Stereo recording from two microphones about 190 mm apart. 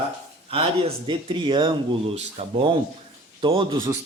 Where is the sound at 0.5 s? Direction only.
30° right (ahead or behind).